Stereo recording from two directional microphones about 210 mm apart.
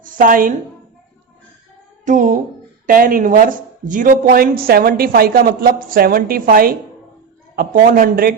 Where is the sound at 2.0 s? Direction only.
40° right (ahead or behind).